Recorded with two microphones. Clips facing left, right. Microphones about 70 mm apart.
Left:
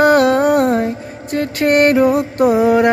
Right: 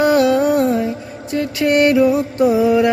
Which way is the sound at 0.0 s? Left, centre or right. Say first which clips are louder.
Left 2 dB; left.